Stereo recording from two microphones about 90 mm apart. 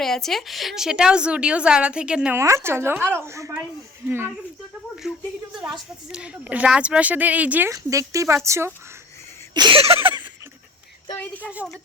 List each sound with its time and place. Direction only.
0.0 s a woman's voice: 5° left (ahead or behind)
2.3 s a woman's voice: 30° right (ahead or behind)
5.0 s a woman's voice: 5° right (ahead or behind)
7.7 s speech: 35° right (ahead or behind)
9.6 s a sound: 75° right (ahead or behind)
11.2 s a woman's voice: 20° left (ahead or behind)